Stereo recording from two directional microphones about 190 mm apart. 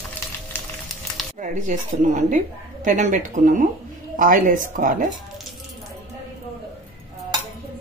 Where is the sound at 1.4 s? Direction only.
40° right (ahead or behind).